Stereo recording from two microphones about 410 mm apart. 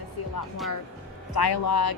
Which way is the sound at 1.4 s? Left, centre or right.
Left.